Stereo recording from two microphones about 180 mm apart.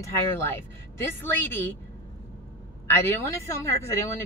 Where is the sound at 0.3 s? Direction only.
15° left (ahead or behind).